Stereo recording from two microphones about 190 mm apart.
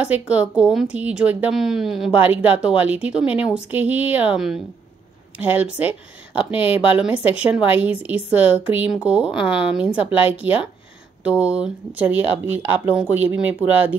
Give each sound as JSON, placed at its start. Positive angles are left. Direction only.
{"t": 0.3, "sound": "a woman's voice", "side_deg": -5}
{"t": 6.3, "sound": "speech", "side_deg": 30}
{"t": 7.0, "sound": "a woman's voice", "side_deg": -5}